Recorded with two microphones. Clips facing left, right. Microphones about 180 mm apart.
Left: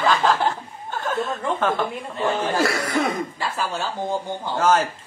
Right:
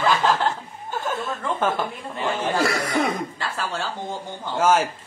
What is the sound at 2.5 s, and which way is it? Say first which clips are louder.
Speech: left 1 dB; centre (ahead or behind).